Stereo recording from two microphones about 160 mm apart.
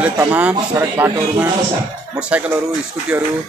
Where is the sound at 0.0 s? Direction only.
10° right (ahead or behind).